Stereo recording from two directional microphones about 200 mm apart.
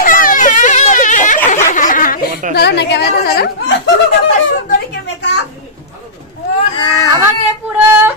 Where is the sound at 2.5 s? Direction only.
55° left (ahead or behind).